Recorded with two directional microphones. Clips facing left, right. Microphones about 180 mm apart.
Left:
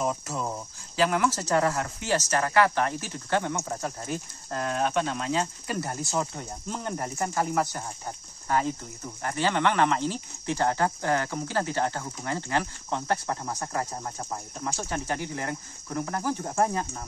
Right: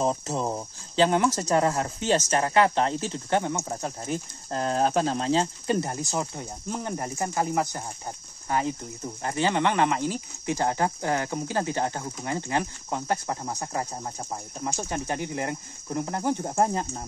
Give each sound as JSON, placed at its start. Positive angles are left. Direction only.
{"t": 0.0, "sound": "speech", "side_deg": -30}